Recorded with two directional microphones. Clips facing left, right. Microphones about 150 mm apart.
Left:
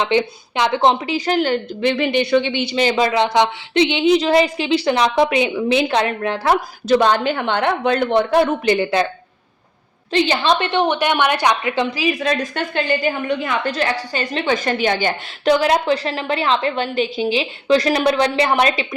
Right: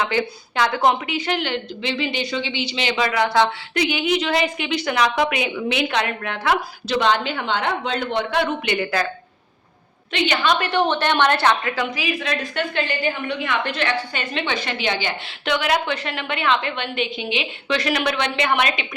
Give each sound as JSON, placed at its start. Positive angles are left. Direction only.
{"t": 0.0, "sound": "a woman's voice", "side_deg": 20}
{"t": 3.1, "sound": "a woman's voice", "side_deg": 20}
{"t": 6.8, "sound": "speech", "side_deg": 45}
{"t": 8.4, "sound": "a woman's voice", "side_deg": 35}
{"t": 10.1, "sound": "a woman's voice", "side_deg": 35}
{"t": 11.7, "sound": "a woman's voice", "side_deg": 25}
{"t": 12.2, "sound": "a woman's voice", "side_deg": 40}